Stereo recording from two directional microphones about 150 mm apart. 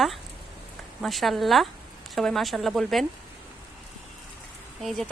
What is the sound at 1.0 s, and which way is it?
Speech, centre (ahead or behind).